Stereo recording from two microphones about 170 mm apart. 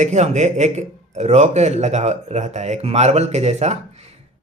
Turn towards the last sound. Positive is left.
turn(degrees=-40)  # may be behind; listen again after turning